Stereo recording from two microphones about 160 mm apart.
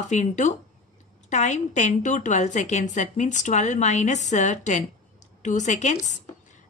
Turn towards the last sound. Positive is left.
turn(degrees=45)  # may be behind; listen again after turning